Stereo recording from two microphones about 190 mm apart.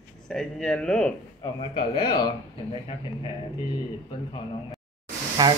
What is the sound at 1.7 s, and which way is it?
Speech, 25° left (ahead or behind).